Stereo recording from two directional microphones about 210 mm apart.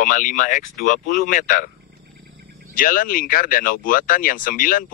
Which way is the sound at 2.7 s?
40° left (ahead or behind).